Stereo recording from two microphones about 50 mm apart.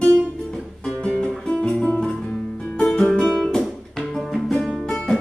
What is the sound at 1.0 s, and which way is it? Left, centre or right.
Music, left.